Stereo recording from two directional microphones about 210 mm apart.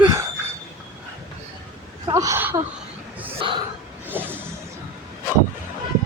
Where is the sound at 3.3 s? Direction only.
25° right (ahead or behind).